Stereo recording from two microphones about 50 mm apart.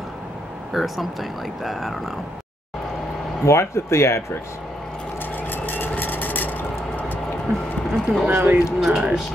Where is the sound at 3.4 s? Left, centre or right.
Left.